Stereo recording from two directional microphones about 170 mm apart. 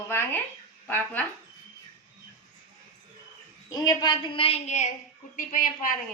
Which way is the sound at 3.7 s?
20° left (ahead or behind).